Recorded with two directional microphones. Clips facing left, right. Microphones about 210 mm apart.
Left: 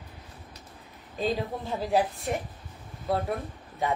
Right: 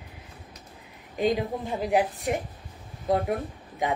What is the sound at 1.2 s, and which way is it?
Speech, 15° right (ahead or behind).